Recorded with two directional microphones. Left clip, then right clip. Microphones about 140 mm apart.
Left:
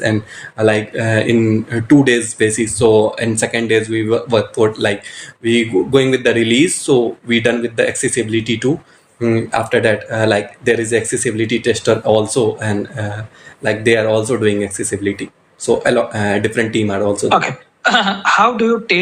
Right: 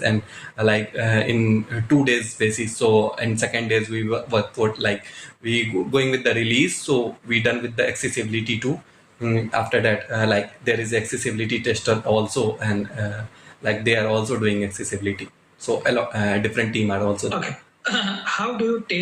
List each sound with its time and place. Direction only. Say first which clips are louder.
0.5 s speech: left 6 dB; 45° left (ahead or behind)